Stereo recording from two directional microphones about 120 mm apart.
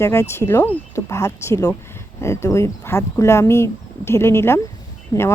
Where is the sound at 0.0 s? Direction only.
20° left (ahead or behind).